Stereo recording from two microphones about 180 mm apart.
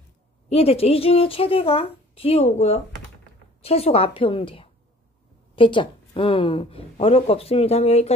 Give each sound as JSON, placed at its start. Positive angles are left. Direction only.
{"t": 0.5, "sound": "speech", "side_deg": 35}